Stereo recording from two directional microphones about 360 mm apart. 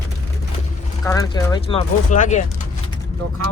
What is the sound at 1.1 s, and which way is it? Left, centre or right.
Speech, centre.